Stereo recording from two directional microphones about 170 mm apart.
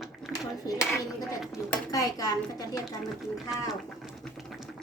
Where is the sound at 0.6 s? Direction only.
15° left (ahead or behind).